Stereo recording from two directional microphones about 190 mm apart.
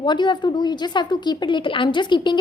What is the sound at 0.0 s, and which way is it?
A woman's voice, 25° left (ahead or behind).